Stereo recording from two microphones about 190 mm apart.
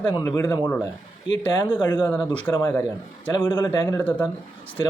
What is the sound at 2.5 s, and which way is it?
Speech, 5° left (ahead or behind).